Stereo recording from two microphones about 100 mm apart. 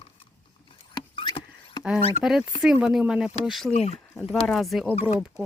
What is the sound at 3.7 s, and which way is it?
Speech, 90° left.